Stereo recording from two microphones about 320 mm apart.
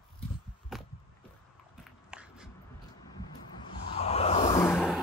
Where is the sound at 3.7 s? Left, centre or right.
Centre.